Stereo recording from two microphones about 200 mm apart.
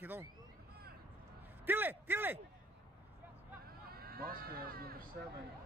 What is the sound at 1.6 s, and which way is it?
Speech, 10° right (ahead or behind).